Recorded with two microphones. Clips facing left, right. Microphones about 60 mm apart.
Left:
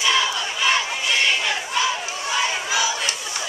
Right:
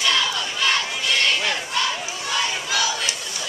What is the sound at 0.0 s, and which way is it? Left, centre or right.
Battle cry, centre.